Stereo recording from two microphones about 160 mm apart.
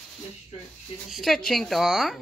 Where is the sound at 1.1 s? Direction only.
Centre (ahead or behind).